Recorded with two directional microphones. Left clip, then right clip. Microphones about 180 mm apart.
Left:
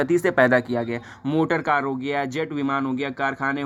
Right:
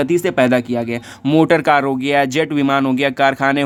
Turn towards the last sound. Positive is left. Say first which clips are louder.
# right 10 dB
turn(degrees=-50)  # may be behind; listen again after turning